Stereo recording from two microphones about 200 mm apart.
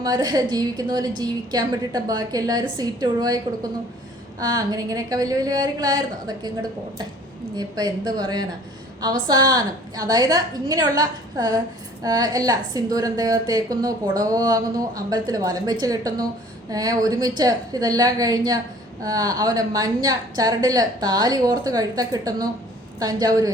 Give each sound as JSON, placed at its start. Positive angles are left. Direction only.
{"t": 0.0, "sound": "a woman's voice", "side_deg": -20}